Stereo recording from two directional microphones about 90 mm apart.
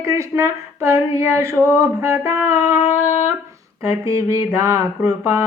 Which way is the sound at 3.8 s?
35° right (ahead or behind).